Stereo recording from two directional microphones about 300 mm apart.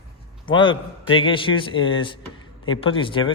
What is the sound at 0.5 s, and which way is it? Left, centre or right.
Speech, centre.